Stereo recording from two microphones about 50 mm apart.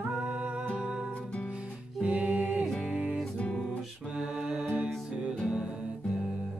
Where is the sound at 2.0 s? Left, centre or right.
Right.